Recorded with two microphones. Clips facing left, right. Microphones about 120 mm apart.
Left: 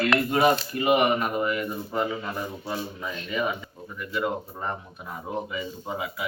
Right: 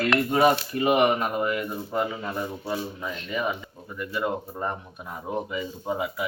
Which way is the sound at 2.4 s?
Centre (ahead or behind).